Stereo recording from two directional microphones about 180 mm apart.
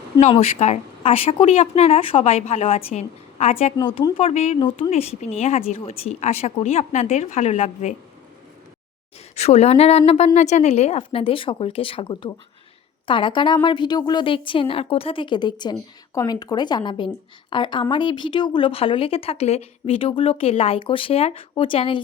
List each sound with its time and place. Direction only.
0.2 s speech: 35° left (ahead or behind)
3.8 s speech: 25° left (ahead or behind)
9.3 s speech: 35° left (ahead or behind)